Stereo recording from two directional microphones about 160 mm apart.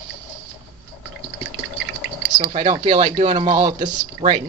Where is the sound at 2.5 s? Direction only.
35° right (ahead or behind).